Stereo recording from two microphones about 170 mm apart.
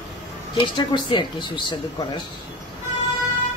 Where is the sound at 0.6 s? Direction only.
25° left (ahead or behind).